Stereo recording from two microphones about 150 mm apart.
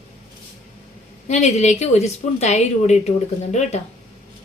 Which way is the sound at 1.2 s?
50° left (ahead or behind).